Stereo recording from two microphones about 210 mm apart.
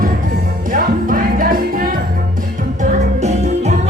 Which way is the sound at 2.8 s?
30° right (ahead or behind).